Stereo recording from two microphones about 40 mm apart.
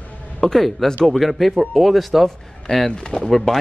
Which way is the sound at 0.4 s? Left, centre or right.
Centre.